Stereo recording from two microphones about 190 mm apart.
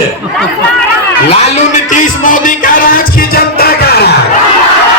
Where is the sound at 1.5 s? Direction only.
40° left (ahead or behind); by 4.1 s 55° left (ahead or behind).